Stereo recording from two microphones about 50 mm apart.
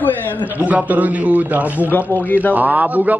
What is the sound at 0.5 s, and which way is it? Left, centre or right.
A man's voice, right.